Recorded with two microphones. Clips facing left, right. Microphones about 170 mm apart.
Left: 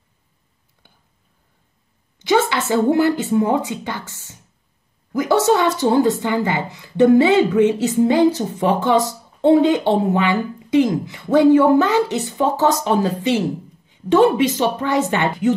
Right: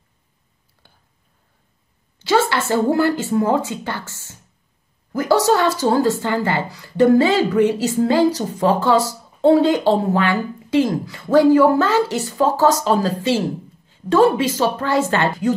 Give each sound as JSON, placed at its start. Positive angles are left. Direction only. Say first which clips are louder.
{"t": 2.1, "sound": "a sound", "louder": "even", "side_deg": 20}
{"t": 3.0, "sound": "speech", "louder": "left 1 dB", "side_deg": 20}
{"t": 8.3, "sound": "speech", "louder": "even", "side_deg": -35}
{"t": 8.7, "sound": "a woman's voice", "louder": "even", "side_deg": 20}